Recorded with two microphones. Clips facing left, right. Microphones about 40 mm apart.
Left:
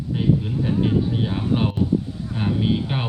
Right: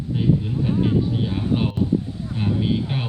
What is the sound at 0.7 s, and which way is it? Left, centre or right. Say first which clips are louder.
A man's voice: even; centre.